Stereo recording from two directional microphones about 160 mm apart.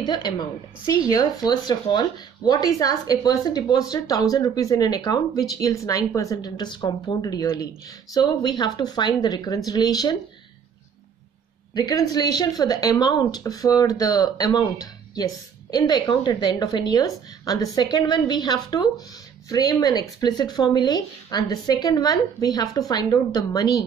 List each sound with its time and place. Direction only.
0.0 s a woman's voice: 25° left (ahead or behind)
11.7 s a woman's voice: 25° left (ahead or behind)